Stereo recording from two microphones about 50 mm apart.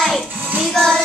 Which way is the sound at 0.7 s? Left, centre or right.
Centre.